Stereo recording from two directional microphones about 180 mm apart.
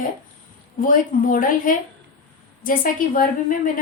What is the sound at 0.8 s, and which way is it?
A woman's voice, 50° left (ahead or behind).